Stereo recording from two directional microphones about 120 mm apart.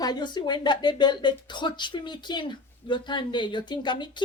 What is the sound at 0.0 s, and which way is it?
Speech, 35° left (ahead or behind).